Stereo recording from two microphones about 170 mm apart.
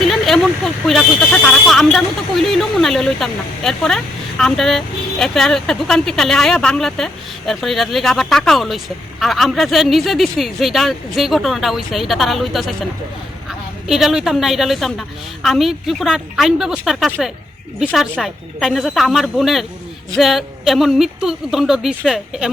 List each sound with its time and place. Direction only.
0.0 s a woman's voice: centre (ahead or behind)